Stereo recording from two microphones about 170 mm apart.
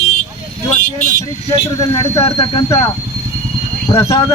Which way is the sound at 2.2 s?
30° left (ahead or behind).